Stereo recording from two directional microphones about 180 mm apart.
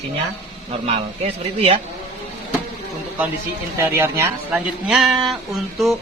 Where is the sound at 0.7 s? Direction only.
35° right (ahead or behind).